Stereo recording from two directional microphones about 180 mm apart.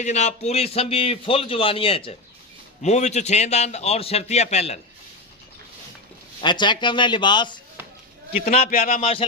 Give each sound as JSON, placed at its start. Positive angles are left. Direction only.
{"t": 0.0, "sound": "a man's voice", "side_deg": 40}
{"t": 6.4, "sound": "a man's voice", "side_deg": 25}
{"t": 8.4, "sound": "a man's voice", "side_deg": 40}
{"t": 8.7, "sound": "speech", "side_deg": 55}
{"t": 9.0, "sound": "a man's voice", "side_deg": 35}